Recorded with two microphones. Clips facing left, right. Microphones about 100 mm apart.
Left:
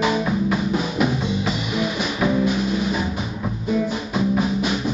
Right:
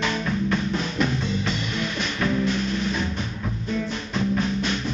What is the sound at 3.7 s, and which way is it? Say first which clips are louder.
Music: left 6 dB; 10° left (ahead or behind).